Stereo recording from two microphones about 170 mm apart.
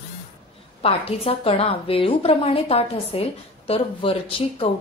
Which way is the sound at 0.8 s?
35° left (ahead or behind).